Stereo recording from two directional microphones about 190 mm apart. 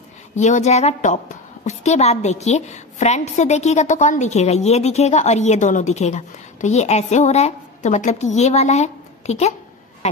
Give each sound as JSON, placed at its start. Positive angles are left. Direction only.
{"t": 0.4, "sound": "a woman's voice", "side_deg": 40}